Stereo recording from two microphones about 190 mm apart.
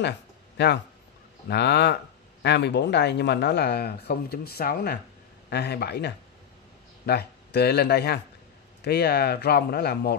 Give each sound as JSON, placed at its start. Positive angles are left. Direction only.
{"t": 1.5, "sound": "speech", "side_deg": 65}